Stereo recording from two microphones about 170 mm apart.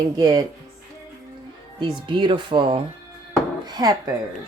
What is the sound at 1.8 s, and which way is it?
Speech, 30° right (ahead or behind).